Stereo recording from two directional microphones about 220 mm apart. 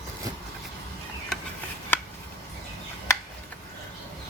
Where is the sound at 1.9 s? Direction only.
10° left (ahead or behind).